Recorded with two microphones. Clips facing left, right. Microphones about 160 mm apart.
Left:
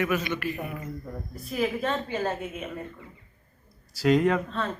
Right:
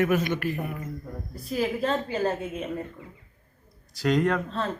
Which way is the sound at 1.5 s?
35° right (ahead or behind).